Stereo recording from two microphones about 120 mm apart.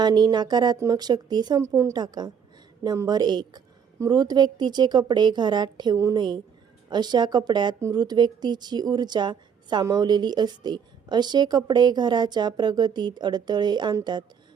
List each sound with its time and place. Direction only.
0.0 s a woman's voice: 35° right (ahead or behind)
1.6 s a woman's voice: 25° right (ahead or behind)